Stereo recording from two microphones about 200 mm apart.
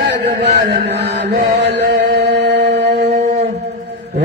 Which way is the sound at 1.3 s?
50° right (ahead or behind).